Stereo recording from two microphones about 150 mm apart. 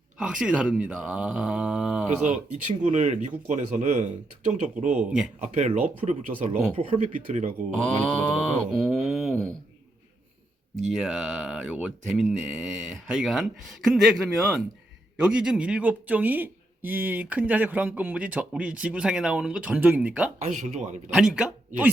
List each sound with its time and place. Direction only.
0.2 s speech: 5° right (ahead or behind)
2.2 s speech: 55° right (ahead or behind)
7.6 s speech: 55° right (ahead or behind)
8.3 s a sound: centre (ahead or behind)
10.8 s speech: centre (ahead or behind)
20.4 s speech: 50° right (ahead or behind)
21.1 s speech: 5° right (ahead or behind)